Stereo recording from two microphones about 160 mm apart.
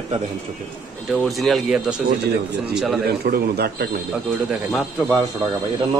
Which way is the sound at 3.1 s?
85° right.